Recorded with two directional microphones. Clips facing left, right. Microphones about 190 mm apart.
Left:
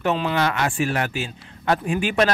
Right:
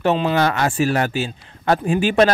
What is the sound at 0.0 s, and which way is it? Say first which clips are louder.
Speech: right 4 dB; 25° right (ahead or behind).